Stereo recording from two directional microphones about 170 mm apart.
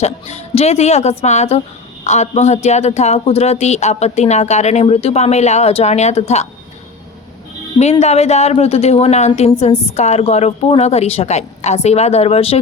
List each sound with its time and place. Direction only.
0.0 s a man's voice: 40° left (ahead or behind)
7.8 s a man's voice: 40° left (ahead or behind)